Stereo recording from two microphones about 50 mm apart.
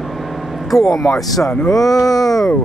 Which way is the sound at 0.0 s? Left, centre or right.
Centre.